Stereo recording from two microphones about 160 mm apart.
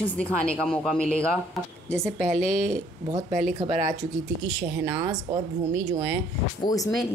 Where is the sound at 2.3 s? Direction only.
50° right (ahead or behind).